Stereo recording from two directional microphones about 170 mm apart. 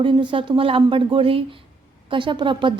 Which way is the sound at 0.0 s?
30° right (ahead or behind).